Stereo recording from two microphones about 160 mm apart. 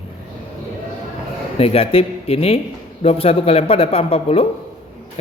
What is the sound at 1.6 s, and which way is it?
A man's voice, 35° left (ahead or behind).